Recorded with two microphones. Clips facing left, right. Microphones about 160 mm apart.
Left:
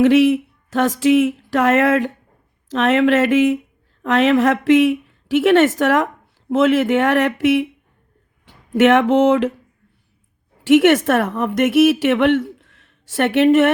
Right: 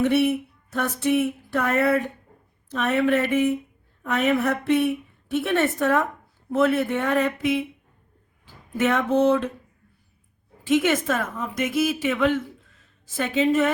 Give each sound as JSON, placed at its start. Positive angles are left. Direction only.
{"t": 0.0, "sound": "a sound", "side_deg": 90}
{"t": 2.6, "sound": "a woman's voice", "side_deg": 90}
{"t": 10.6, "sound": "speech", "side_deg": 75}